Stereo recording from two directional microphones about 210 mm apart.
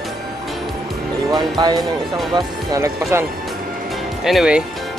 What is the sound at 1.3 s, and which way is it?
Speech, 20° right (ahead or behind).